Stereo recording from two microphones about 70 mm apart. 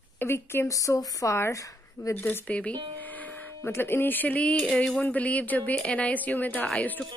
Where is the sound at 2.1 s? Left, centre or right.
Left.